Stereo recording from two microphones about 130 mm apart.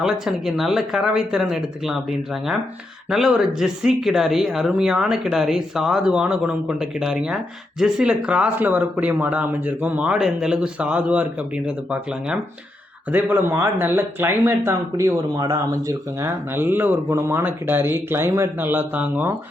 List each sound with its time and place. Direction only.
0.0 s speech: 5° right (ahead or behind)